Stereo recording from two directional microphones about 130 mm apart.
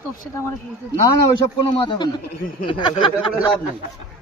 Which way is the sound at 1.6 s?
40° left (ahead or behind).